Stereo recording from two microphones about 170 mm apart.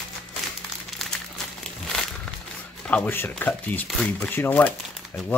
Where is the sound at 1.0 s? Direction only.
Centre (ahead or behind).